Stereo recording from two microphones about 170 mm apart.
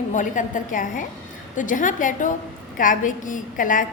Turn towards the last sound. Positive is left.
turn(degrees=50)  # may be behind; listen again after turning